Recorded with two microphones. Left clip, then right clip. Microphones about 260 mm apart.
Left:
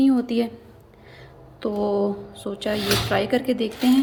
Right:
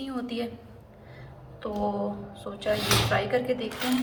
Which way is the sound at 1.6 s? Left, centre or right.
Left.